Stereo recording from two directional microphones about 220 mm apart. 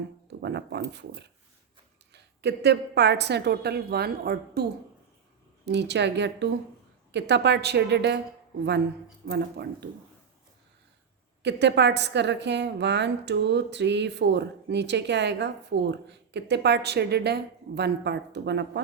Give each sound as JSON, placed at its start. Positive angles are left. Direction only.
{"t": 0.4, "sound": "a woman's voice", "side_deg": -50}
{"t": 5.6, "sound": "a woman's voice", "side_deg": -50}
{"t": 9.2, "sound": "a woman's voice", "side_deg": -50}
{"t": 11.4, "sound": "a woman's voice", "side_deg": -50}